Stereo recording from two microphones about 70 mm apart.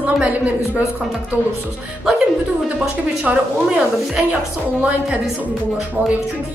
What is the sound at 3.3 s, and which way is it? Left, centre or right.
A woman's voice, centre.